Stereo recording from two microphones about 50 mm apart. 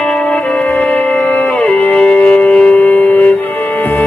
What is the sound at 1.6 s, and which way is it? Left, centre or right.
Wind instrument, left.